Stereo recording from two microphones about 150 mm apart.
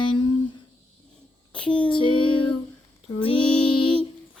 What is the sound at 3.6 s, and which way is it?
Music, 35° left (ahead or behind).